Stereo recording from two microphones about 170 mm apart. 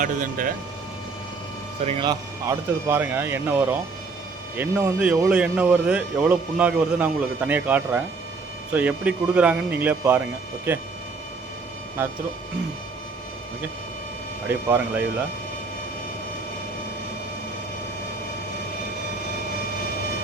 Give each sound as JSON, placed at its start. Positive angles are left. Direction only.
{"t": 0.0, "sound": "speech", "side_deg": -50}
{"t": 1.8, "sound": "speech", "side_deg": -40}
{"t": 2.0, "sound": "a man's voice", "side_deg": -15}
{"t": 14.4, "sound": "a man's voice", "side_deg": -10}